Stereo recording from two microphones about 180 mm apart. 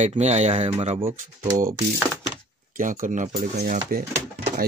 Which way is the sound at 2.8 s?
45° right (ahead or behind).